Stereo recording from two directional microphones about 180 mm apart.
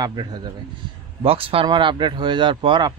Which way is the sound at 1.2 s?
30° right (ahead or behind).